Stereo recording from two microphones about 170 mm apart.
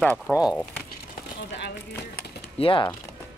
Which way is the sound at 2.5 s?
30° left (ahead or behind).